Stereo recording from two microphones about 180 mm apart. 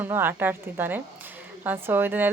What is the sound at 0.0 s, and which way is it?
A woman's voice, 10° right (ahead or behind).